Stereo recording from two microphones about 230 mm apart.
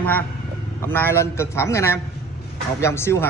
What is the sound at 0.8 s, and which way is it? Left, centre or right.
A man's voice, centre.